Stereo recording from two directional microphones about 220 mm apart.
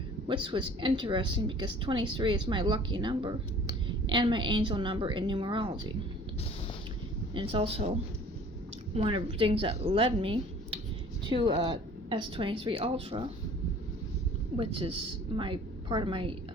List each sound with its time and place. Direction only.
0.3 s a woman's voice: 20° right (ahead or behind)
7.3 s a woman's voice: 25° right (ahead or behind)
9.0 s a woman's voice: 25° right (ahead or behind)
14.5 s a woman's voice: 25° right (ahead or behind)